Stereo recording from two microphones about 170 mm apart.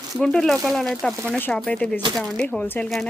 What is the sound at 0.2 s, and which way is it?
Speech, 5° left (ahead or behind).